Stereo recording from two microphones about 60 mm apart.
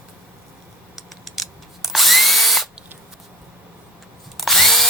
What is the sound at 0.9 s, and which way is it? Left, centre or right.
Drill, centre.